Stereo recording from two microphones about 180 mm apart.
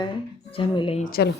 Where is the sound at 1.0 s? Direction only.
55° left (ahead or behind).